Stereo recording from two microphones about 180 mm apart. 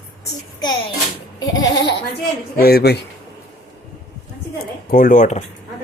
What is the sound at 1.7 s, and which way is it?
Speech, 65° left (ahead or behind).